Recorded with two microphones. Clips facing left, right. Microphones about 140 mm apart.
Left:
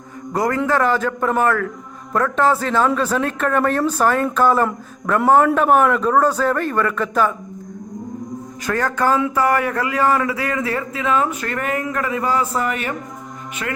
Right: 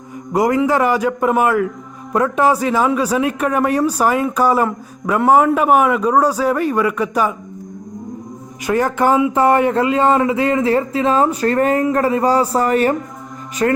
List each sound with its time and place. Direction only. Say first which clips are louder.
0.3 s a man's voice: right 4 dB; 15° right (ahead or behind)
8.6 s a man's voice: right 4 dB; 15° right (ahead or behind); by 13.8 s 40° right (ahead or behind)